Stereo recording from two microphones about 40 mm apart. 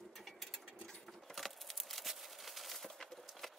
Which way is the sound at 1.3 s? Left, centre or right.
Centre.